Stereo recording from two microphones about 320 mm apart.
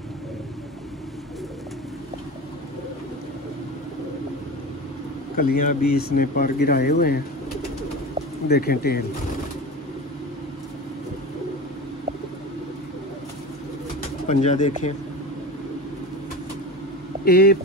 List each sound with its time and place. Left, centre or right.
5.3 s speech: left
8.5 s speech: left
14.2 s speech: left
17.2 s speech: left